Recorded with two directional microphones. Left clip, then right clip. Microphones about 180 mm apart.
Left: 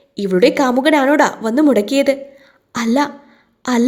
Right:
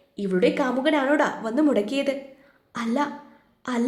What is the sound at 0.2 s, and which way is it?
A woman's voice, 40° left (ahead or behind).